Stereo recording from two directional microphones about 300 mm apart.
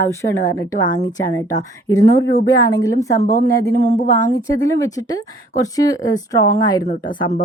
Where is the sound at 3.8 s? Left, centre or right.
Left.